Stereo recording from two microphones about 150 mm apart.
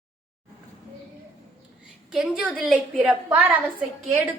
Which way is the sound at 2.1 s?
5° right (ahead or behind).